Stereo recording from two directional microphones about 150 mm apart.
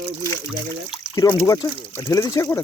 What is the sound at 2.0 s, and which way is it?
Speech, 25° left (ahead or behind).